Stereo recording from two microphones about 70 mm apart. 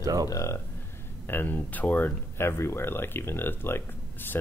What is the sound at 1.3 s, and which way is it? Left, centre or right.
Speech, left.